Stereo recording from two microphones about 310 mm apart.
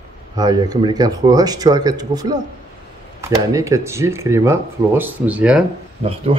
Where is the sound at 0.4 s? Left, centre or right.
Centre.